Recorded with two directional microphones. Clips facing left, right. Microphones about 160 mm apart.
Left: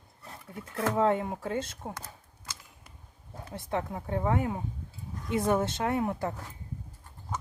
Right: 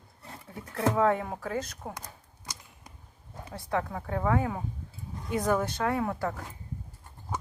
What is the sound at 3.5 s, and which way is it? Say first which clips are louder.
A woman's voice: right 1 dB; 20° left (ahead or behind).